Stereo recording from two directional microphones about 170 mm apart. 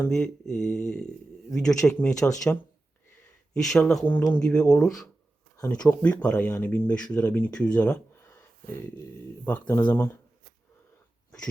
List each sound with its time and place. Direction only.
0.0 s speech: 5° left (ahead or behind)
5.5 s speech: 20° left (ahead or behind)
6.0 s speech: 10° left (ahead or behind)
9.5 s speech: 10° left (ahead or behind)